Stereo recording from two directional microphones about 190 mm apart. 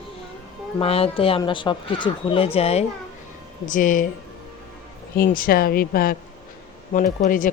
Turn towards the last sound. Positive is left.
turn(degrees=45)  # may be behind; listen again after turning